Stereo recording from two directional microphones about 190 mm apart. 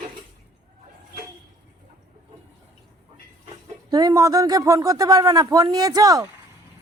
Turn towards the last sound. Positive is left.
turn(degrees=-20)  # may be behind; listen again after turning